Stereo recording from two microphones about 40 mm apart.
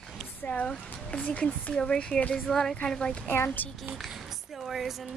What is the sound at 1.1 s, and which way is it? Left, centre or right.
Speech, left.